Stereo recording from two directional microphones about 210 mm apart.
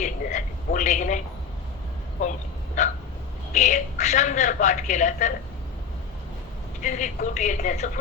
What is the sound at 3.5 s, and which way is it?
A woman's voice, 35° left (ahead or behind).